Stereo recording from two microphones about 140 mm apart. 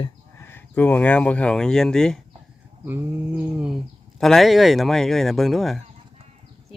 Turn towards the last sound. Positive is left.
turn(degrees=0)  # may be behind; listen again after turning